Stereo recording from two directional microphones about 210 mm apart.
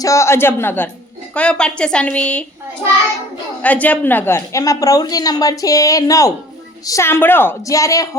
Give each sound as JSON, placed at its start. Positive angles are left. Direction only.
{"t": 0.0, "sound": "a woman's voice", "side_deg": 15}
{"t": 3.6, "sound": "a woman's voice", "side_deg": 5}